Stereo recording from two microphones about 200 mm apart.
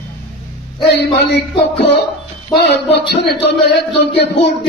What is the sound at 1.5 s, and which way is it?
Speech, 60° left (ahead or behind).